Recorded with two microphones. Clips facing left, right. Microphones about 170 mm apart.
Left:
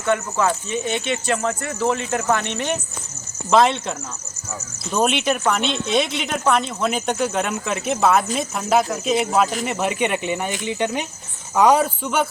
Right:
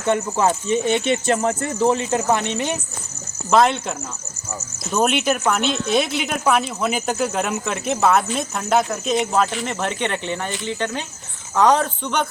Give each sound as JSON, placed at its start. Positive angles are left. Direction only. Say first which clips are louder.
{"t": 0.1, "sound": "speech", "louder": "right 1 dB", "side_deg": -25}
{"t": 1.8, "sound": "speech", "louder": "right 3 dB", "side_deg": -20}
{"t": 3.5, "sound": "speech", "louder": "even", "side_deg": 0}